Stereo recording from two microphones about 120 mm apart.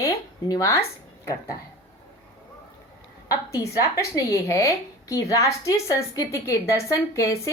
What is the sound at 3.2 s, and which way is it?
A woman's voice, 30° left (ahead or behind).